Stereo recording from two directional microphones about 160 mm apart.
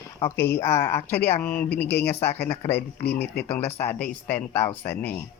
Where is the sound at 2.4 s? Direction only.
40° left (ahead or behind).